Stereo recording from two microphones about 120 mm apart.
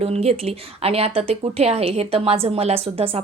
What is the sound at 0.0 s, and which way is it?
Speech, 60° right (ahead or behind).